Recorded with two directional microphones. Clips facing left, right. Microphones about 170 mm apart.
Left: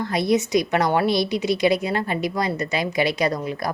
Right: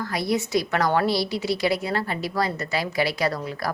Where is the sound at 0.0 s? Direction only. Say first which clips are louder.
Left 4 dB; 20° left (ahead or behind).